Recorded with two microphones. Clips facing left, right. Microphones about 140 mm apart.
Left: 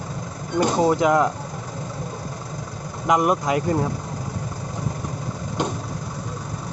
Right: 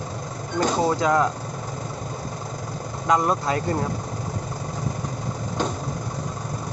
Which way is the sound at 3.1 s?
15° left (ahead or behind).